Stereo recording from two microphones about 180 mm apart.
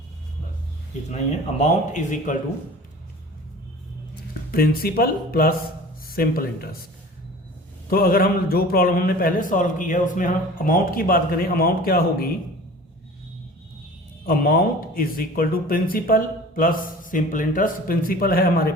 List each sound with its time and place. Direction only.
1.1 s speech: 40° left (ahead or behind)
4.5 s speech: 55° left (ahead or behind)
7.9 s a man's voice: 55° left (ahead or behind)
14.3 s a man's voice: 55° left (ahead or behind)